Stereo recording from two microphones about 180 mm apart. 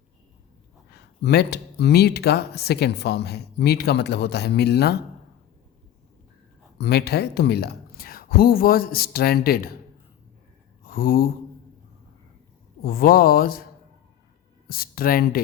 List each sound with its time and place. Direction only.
0.9 s speech: 65° left (ahead or behind)
6.7 s speech: 65° left (ahead or behind)
10.8 s a sound: 55° left (ahead or behind)
12.8 s speech: 55° left (ahead or behind)
14.7 s speech: 55° left (ahead or behind)